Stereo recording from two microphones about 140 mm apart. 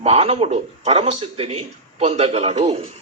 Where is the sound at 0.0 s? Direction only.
50° right (ahead or behind).